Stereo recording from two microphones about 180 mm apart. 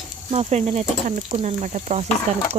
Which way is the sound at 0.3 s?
35° right (ahead or behind).